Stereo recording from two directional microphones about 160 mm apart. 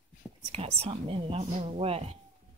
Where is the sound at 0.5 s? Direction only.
40° right (ahead or behind).